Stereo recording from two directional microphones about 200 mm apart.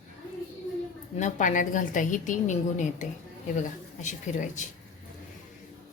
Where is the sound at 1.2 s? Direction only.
40° left (ahead or behind).